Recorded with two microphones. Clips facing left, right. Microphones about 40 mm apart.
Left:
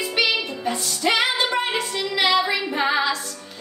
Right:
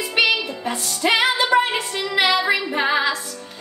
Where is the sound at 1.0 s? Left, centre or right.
Right.